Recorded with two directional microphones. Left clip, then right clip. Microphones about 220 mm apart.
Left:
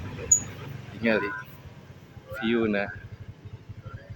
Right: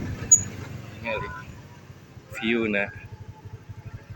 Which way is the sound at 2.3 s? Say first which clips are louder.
Right 1 dB; 15° left (ahead or behind).